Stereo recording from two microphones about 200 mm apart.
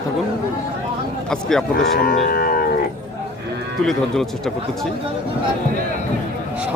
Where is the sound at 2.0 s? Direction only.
45° left (ahead or behind).